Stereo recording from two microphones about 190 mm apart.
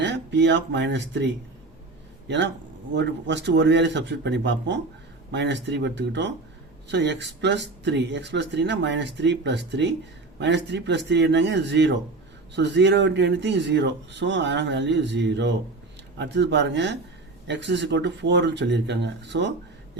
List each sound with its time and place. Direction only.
0.0 s speech: 70° right (ahead or behind)